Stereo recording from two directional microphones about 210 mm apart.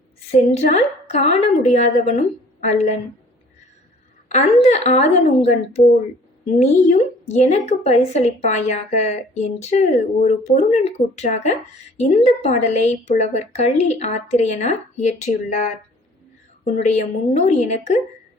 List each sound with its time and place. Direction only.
0.3 s a woman's voice: 35° left (ahead or behind)
4.6 s a woman's voice: 30° left (ahead or behind)
6.6 s a woman's voice: 35° left (ahead or behind)
16.6 s a woman's voice: 35° left (ahead or behind)